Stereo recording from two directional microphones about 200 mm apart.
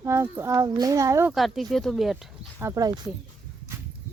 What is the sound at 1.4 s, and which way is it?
Speech, centre (ahead or behind).